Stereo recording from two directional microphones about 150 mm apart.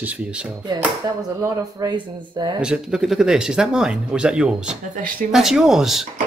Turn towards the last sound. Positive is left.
turn(degrees=0)  # may be behind; listen again after turning